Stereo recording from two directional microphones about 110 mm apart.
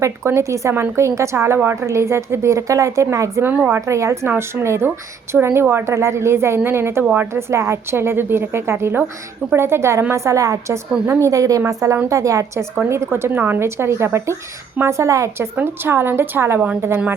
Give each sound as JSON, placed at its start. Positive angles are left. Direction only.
{"t": 0.0, "sound": "a woman's voice", "side_deg": -25}
{"t": 3.5, "sound": "speech", "side_deg": -15}
{"t": 3.8, "sound": "a woman's voice", "side_deg": -25}